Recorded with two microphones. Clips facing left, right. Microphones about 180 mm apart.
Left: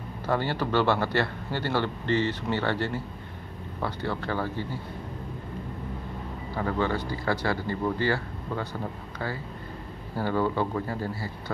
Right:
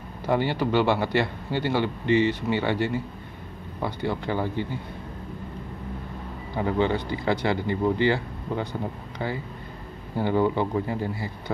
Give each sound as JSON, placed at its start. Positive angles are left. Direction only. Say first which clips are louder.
{"t": 0.3, "sound": "a man's voice", "louder": "right 3 dB", "side_deg": -15}
{"t": 6.5, "sound": "speech", "louder": "right 4 dB", "side_deg": -20}
{"t": 10.1, "sound": "a man's voice", "louder": "right 3 dB", "side_deg": -20}